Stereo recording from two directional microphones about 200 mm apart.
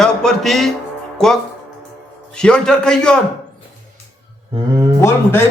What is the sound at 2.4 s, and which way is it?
Speech, 5° left (ahead or behind).